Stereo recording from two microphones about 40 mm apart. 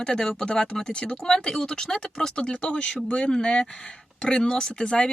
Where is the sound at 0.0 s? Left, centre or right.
Centre.